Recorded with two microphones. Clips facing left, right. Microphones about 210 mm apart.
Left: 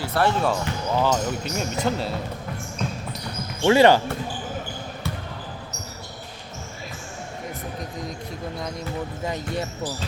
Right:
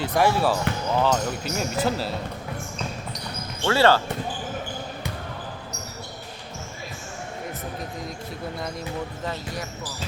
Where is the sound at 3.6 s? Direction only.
15° left (ahead or behind).